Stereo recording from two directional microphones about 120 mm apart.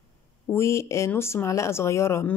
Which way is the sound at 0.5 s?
20° left (ahead or behind).